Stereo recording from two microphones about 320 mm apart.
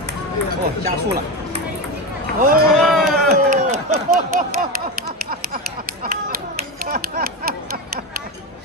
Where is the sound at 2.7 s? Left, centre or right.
Centre.